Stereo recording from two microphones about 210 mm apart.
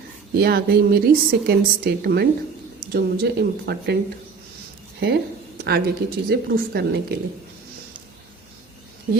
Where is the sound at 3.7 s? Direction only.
50° right (ahead or behind).